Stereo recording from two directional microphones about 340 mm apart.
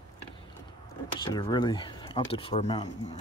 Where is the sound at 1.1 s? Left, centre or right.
Centre.